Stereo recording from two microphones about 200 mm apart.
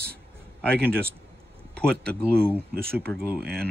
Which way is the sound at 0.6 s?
5° left (ahead or behind).